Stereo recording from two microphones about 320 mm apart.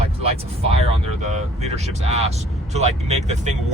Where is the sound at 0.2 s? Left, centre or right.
Centre.